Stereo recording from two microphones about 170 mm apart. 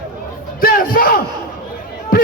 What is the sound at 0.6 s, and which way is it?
Battle cry, 55° left (ahead or behind).